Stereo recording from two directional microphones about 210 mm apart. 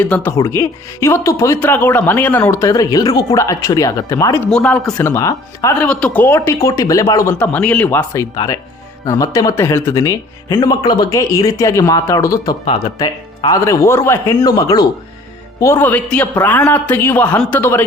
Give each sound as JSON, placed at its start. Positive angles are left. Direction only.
{"t": 0.0, "sound": "speech", "side_deg": 10}